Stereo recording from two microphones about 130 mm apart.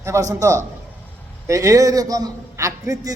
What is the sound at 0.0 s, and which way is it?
A man's voice, 20° right (ahead or behind).